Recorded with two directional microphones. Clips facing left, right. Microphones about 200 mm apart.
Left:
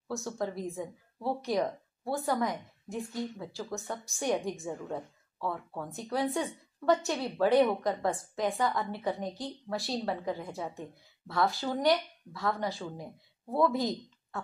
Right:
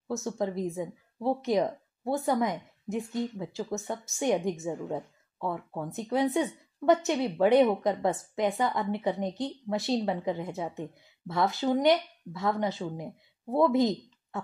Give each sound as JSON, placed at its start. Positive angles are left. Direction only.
{"t": 0.1, "sound": "a woman's voice", "side_deg": -20}